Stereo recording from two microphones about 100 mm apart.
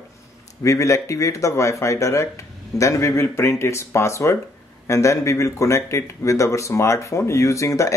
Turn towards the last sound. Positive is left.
turn(degrees=30)  # may be behind; listen again after turning